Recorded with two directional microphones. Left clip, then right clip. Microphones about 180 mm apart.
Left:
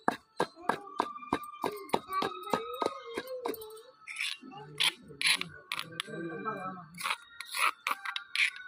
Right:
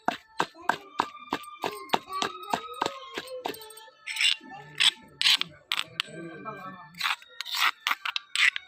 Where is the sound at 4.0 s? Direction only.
10° right (ahead or behind).